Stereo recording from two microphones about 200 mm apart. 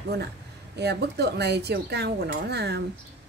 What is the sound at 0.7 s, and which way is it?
A woman's voice, 55° right (ahead or behind).